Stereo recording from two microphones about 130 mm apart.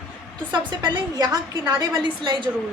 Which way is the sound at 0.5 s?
35° right (ahead or behind).